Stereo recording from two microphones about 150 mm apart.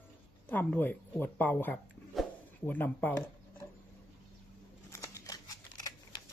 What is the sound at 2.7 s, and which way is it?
Speech, 10° left (ahead or behind).